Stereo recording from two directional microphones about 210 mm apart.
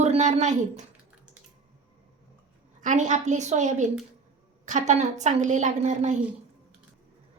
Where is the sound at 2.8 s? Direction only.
35° right (ahead or behind).